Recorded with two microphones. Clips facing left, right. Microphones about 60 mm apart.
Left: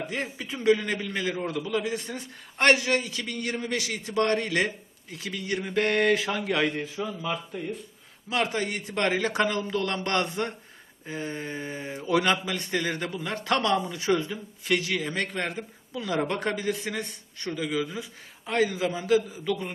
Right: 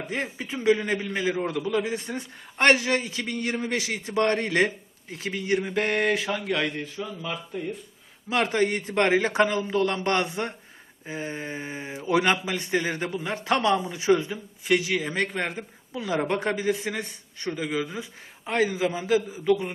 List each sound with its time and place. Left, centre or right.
0.1 s a man's voice: right
5.6 s speech: centre
8.3 s a man's voice: right; by 19.7 s centre